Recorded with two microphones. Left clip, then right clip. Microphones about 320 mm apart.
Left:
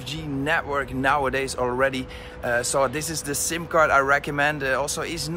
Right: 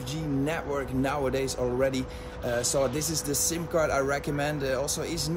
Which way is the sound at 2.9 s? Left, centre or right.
Left.